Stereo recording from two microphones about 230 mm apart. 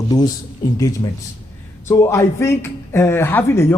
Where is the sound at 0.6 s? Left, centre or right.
Centre.